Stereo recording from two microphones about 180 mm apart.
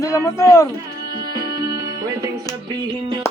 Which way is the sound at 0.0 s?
15° left (ahead or behind).